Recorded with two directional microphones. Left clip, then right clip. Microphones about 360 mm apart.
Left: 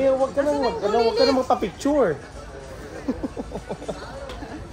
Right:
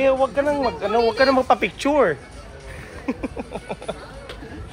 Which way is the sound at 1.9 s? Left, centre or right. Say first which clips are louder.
Right 2 dB; right.